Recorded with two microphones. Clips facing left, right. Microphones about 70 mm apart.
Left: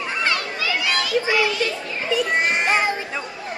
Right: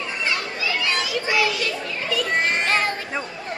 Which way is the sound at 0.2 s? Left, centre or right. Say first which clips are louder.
Left 2 dB; left.